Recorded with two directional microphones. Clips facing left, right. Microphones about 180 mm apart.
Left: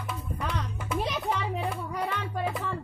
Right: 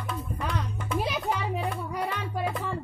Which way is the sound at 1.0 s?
5° right (ahead or behind).